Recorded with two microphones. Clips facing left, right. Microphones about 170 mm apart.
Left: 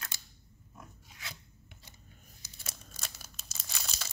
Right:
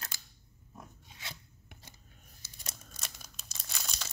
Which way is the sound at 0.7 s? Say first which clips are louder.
Right 2 dB; 25° right (ahead or behind).